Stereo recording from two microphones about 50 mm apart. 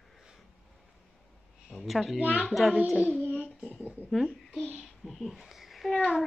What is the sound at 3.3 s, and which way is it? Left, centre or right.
Child singing, left.